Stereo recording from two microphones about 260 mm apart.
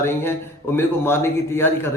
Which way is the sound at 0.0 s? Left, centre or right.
Centre.